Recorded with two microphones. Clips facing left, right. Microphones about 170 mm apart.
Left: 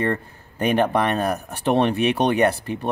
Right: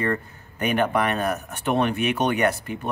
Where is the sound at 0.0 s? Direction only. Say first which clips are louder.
Left 2 dB; 30° left (ahead or behind).